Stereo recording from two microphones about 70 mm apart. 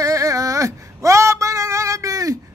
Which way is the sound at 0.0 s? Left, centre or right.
Right.